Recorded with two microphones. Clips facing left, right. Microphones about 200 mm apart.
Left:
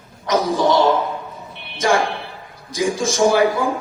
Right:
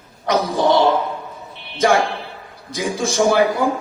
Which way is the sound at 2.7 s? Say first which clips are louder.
Left 2 dB; 55° right (ahead or behind).